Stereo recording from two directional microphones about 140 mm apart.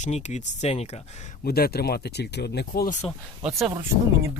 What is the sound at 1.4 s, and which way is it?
Speech, 90° left.